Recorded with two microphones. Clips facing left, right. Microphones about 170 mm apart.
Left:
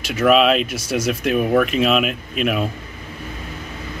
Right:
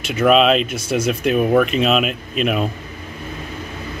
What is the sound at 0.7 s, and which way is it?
Speech, 55° right (ahead or behind).